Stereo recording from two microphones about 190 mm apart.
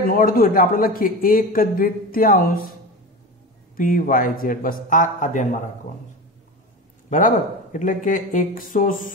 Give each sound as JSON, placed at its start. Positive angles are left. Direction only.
{"t": 0.0, "sound": "a man's voice", "side_deg": 50}
{"t": 3.7, "sound": "a man's voice", "side_deg": 45}
{"t": 7.1, "sound": "a man's voice", "side_deg": 45}